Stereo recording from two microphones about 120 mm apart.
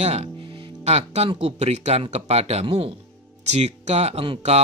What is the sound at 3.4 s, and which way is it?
Speech, 65° right (ahead or behind).